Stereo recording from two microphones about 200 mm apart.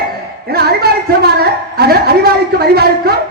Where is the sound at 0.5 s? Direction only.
50° right (ahead or behind).